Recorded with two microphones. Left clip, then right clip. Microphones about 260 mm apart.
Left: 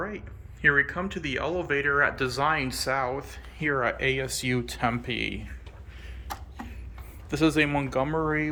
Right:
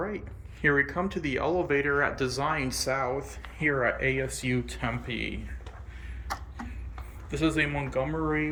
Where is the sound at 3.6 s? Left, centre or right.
Centre.